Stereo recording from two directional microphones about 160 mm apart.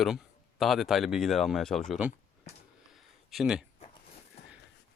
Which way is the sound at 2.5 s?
45° left (ahead or behind).